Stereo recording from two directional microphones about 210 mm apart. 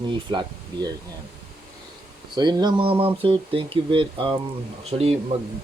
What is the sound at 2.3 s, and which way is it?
Speech, 20° right (ahead or behind).